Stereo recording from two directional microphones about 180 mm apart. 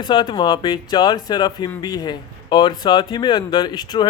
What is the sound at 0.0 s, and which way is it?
A man's voice, 25° left (ahead or behind).